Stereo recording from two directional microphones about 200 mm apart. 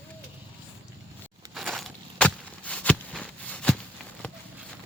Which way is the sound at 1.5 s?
Centre (ahead or behind).